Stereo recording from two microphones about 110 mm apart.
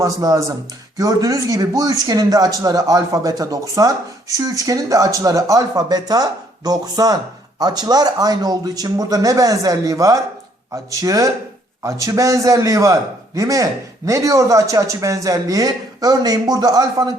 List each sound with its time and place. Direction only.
0.0 s a man's voice: 35° right (ahead or behind)